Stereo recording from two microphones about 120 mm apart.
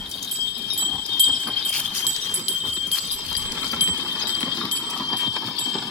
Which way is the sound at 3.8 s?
90° right.